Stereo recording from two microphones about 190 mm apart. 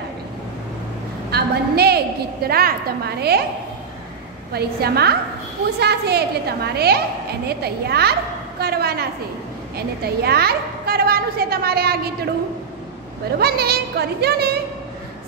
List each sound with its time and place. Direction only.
1.3 s a woman's voice: 55° right (ahead or behind)
4.5 s a woman's voice: 55° right (ahead or behind)
13.4 s a woman's voice: 55° right (ahead or behind)